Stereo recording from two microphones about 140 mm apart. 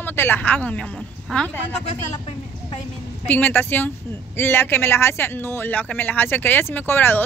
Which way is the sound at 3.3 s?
15° left (ahead or behind).